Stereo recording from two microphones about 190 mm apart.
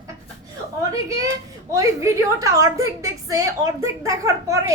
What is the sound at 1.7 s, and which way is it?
A child's voice, 15° right (ahead or behind).